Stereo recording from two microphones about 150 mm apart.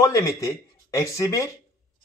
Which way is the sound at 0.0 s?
20° left (ahead or behind).